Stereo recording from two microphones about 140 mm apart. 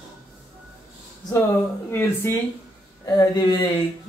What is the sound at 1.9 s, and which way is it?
Speech, 20° left (ahead or behind).